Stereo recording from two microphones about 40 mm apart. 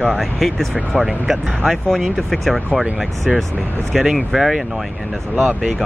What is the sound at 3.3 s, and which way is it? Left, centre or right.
Speech, centre.